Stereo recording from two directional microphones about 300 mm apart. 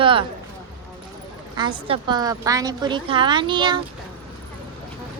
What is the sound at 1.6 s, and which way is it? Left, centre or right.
Speech, centre.